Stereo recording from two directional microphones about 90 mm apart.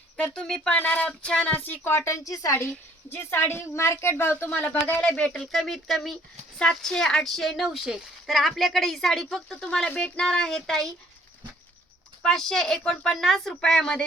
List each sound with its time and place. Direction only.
0.3 s a woman's voice: 5° left (ahead or behind); by 2.6 s 40° left (ahead or behind)
3.1 s a woman's voice: 25° left (ahead or behind)
5.0 s speech: 10° left (ahead or behind)
12.2 s speech: 5° left (ahead or behind)